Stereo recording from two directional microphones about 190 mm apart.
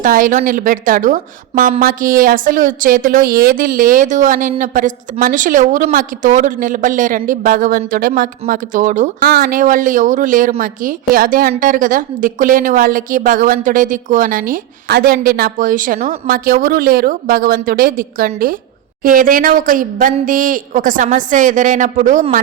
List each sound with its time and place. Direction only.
0.0 s a woman's voice: 45° right (ahead or behind)